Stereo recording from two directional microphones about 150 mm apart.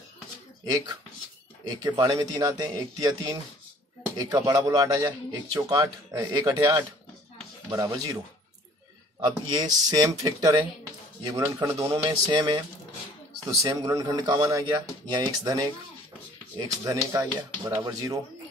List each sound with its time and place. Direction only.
2.0 s a man's voice: 25° right (ahead or behind)
9.2 s a man's voice: 25° right (ahead or behind)